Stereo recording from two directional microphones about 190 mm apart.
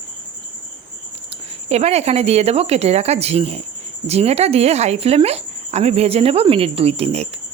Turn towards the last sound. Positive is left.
turn(degrees=-35)  # may be behind; listen again after turning